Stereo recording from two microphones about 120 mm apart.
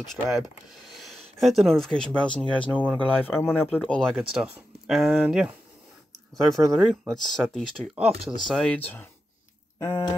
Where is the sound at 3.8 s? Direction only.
5° left (ahead or behind).